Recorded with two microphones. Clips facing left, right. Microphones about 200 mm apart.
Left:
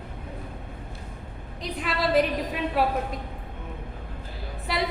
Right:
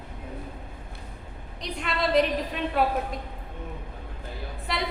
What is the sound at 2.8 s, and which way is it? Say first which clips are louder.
Speech: even; centre (ahead or behind).